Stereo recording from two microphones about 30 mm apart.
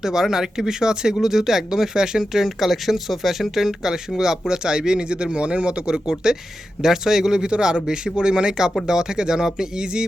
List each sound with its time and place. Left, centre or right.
0.0 s a man's voice: centre; by 5.8 s right
5.8 s speech: right
6.8 s speech: centre